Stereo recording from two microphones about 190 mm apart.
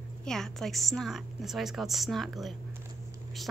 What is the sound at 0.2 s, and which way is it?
A woman's voice, centre (ahead or behind).